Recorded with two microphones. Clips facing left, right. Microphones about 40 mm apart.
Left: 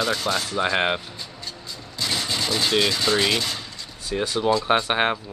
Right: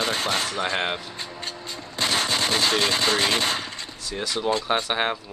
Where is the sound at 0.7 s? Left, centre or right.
Centre.